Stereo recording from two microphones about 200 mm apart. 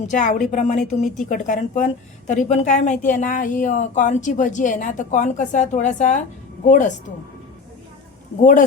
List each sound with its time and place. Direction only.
0.0 s a woman's voice: 40° left (ahead or behind)
8.4 s a woman's voice: 40° left (ahead or behind)